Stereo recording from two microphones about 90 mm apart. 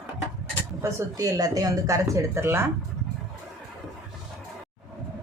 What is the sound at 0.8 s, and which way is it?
Speech, 35° right (ahead or behind).